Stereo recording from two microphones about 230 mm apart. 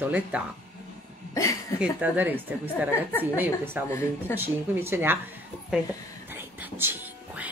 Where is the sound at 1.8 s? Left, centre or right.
Centre.